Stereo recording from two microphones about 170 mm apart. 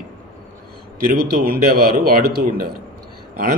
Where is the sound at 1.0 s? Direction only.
55° right (ahead or behind).